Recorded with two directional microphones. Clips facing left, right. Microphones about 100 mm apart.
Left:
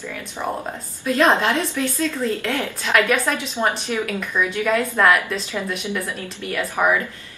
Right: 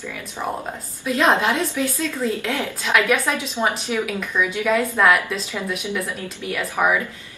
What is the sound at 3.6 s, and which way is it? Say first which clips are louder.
A woman's voice: even; 15° right (ahead or behind).